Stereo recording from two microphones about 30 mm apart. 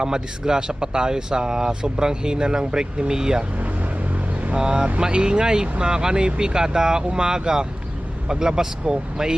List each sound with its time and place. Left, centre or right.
0.0 s speech: right
4.5 s speech: right